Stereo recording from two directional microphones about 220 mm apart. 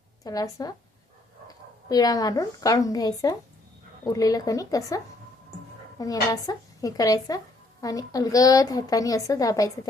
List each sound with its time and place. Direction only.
0.3 s a woman's voice: 15° left (ahead or behind)
6.0 s speech: 15° left (ahead or behind)